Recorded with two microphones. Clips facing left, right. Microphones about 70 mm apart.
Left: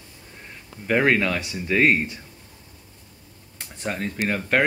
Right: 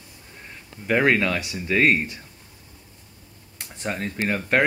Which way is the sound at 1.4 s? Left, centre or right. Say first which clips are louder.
Even; left.